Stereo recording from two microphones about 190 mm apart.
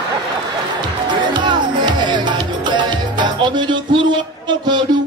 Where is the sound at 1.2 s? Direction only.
25° right (ahead or behind).